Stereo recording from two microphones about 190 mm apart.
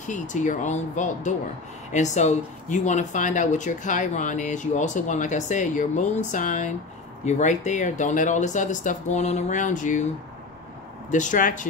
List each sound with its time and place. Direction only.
0.0 s speech: 40° left (ahead or behind)
11.1 s speech: 40° left (ahead or behind)